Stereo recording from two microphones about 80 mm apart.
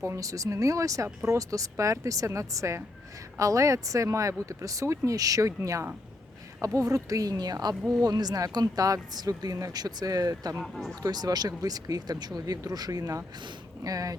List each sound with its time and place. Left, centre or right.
0.0 s speech: right
10.6 s speech: centre
11.0 s speech: right